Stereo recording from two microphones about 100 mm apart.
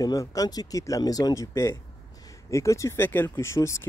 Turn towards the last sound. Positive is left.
turn(degrees=30)  # may be behind; listen again after turning